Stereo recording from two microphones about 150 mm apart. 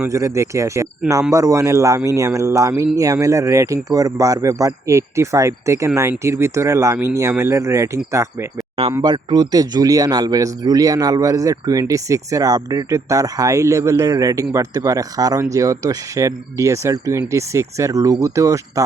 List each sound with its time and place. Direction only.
0.0 s speech: 20° right (ahead or behind)